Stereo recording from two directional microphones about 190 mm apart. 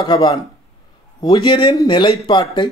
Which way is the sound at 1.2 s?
20° left (ahead or behind).